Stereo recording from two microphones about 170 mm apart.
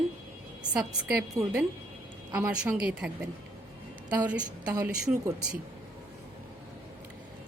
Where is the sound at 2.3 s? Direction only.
10° right (ahead or behind).